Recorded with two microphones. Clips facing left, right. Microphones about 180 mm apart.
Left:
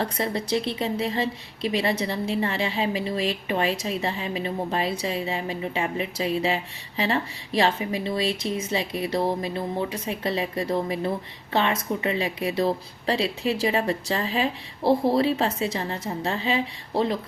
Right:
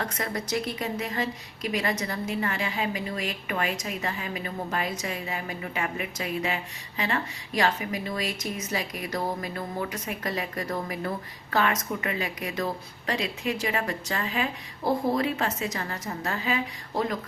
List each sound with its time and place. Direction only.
0.0 s a woman's voice: 30° left (ahead or behind)